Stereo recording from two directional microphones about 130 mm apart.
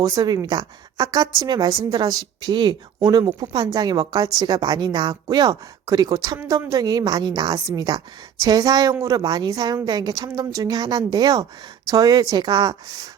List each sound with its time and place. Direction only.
0.0 s a woman's voice: 25° right (ahead or behind)